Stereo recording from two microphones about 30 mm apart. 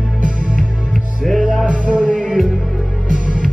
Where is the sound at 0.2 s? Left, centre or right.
Right.